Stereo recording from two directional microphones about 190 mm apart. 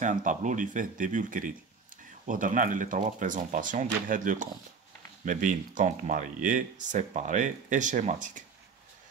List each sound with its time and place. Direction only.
0.0 s speech: 40° right (ahead or behind)